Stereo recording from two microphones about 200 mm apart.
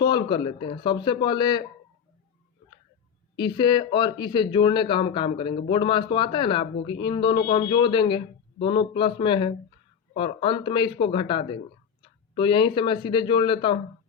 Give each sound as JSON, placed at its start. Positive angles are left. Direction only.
{"t": 0.0, "sound": "speech", "side_deg": 20}
{"t": 3.3, "sound": "speech", "side_deg": 20}